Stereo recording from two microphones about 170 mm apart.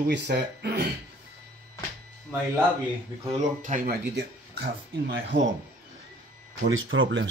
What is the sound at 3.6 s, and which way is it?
Speech, 55° right (ahead or behind).